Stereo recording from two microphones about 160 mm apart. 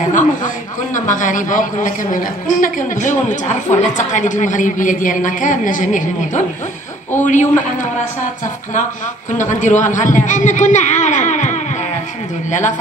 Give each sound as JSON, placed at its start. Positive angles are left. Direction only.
{"t": 0.1, "sound": "a sound", "side_deg": 55}
{"t": 0.9, "sound": "a woman's voice", "side_deg": 55}
{"t": 9.4, "sound": "a woman's voice", "side_deg": 50}